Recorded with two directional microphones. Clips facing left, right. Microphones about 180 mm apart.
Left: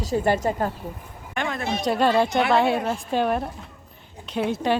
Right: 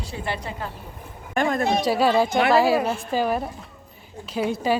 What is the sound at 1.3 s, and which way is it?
Speech, 40° right (ahead or behind).